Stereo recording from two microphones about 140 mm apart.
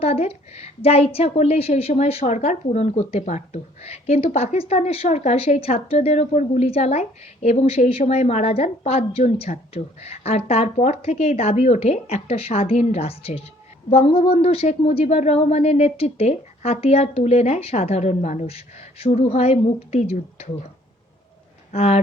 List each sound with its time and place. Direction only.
0.0 s a woman's voice: 45° left (ahead or behind)
21.7 s a woman's voice: 50° left (ahead or behind)